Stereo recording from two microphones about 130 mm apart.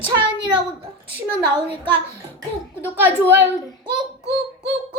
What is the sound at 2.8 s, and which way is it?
Speech, 15° right (ahead or behind).